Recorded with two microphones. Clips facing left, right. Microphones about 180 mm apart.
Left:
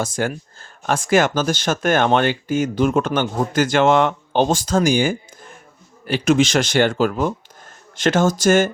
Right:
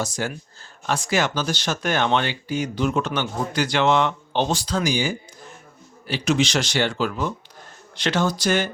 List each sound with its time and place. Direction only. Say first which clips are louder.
0.0 s speech: left 4 dB; 50° left (ahead or behind)